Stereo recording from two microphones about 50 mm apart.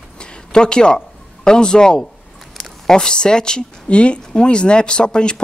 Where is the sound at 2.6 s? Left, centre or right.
Centre.